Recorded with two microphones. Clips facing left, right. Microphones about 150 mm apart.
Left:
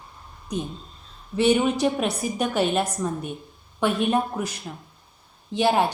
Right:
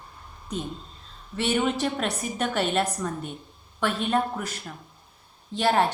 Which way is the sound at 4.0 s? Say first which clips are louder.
Left 3 dB; 10° left (ahead or behind).